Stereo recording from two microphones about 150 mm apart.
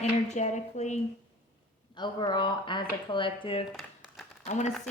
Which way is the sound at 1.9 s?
30° left (ahead or behind).